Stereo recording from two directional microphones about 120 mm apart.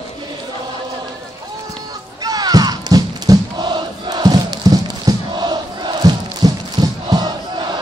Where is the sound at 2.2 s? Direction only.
30° right (ahead or behind).